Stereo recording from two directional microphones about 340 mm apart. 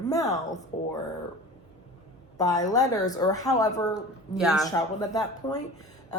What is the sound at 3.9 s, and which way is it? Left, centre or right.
Speech, centre.